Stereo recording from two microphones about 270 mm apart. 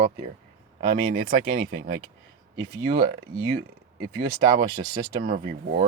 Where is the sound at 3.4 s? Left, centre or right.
Right.